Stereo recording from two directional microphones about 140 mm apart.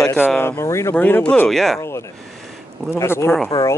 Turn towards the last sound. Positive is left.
turn(degrees=25)  # may be behind; listen again after turning